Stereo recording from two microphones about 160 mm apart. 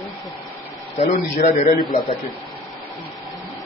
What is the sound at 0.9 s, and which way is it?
A man's voice, 45° left (ahead or behind).